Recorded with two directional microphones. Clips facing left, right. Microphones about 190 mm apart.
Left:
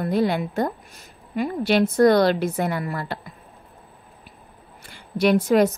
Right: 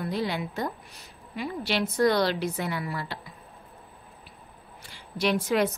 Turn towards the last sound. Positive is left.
turn(degrees=50)  # may be behind; listen again after turning